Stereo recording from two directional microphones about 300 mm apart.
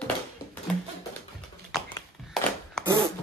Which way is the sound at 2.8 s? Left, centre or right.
Centre.